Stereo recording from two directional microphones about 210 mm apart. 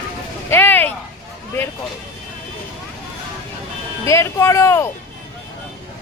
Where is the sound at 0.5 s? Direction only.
10° left (ahead or behind).